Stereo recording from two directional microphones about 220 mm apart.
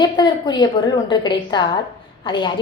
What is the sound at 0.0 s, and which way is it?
A woman's voice, 20° left (ahead or behind).